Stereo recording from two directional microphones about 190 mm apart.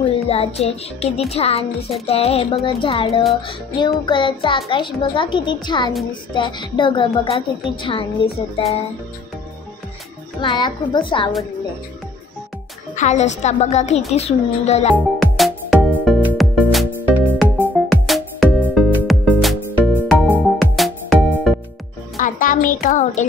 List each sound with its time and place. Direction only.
0.0 s music: 30° left (ahead or behind)
0.6 s a woman's voice: 35° left (ahead or behind)
10.4 s a child's voice: 25° left (ahead or behind)
12.9 s a woman's voice: 40° left (ahead or behind)
15.0 s music: centre (ahead or behind)
22.1 s music: 45° left (ahead or behind)